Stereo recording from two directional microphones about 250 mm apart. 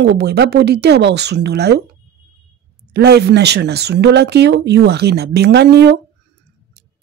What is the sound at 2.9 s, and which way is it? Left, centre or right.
Speech, right.